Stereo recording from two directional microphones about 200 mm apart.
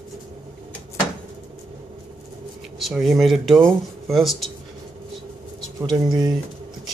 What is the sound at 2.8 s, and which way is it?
Speech, centre (ahead or behind).